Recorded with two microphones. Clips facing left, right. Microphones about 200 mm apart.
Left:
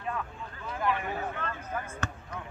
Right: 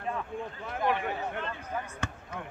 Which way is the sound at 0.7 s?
60° right (ahead or behind).